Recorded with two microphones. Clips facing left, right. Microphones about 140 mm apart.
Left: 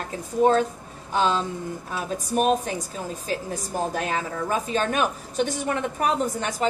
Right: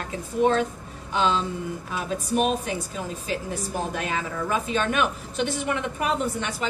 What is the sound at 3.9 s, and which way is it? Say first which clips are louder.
A woman's voice: left 2 dB; 40° left (ahead or behind).